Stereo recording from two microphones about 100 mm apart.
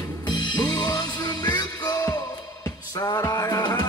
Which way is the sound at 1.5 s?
40° left (ahead or behind).